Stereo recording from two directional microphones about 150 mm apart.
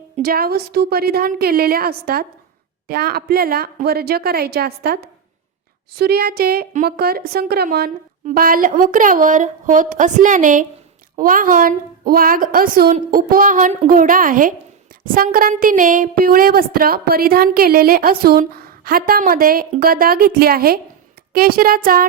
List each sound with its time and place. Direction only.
0.2 s a woman's voice: 85° right
6.0 s a woman's voice: 90° right
8.3 s a woman's voice: 70° right (ahead or behind)